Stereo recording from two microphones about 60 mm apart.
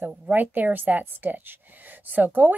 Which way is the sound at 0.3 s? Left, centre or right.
Right.